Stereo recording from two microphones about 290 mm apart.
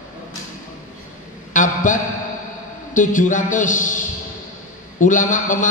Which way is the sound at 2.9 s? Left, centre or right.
Left.